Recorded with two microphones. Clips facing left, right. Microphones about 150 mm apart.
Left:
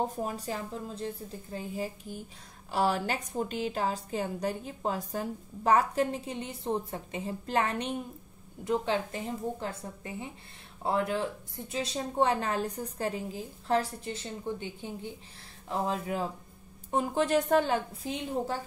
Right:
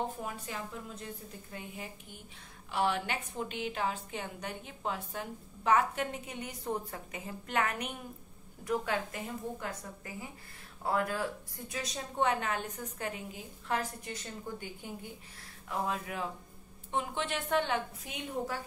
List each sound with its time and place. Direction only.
0.0 s a woman's voice: 35° left (ahead or behind)
16.9 s a woman's voice: 40° left (ahead or behind)